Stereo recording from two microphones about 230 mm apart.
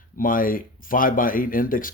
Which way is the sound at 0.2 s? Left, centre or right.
Left.